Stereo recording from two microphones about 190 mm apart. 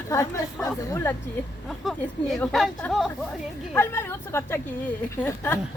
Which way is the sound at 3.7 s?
10° left (ahead or behind).